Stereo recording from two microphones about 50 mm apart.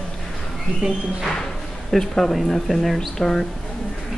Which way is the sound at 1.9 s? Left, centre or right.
Centre.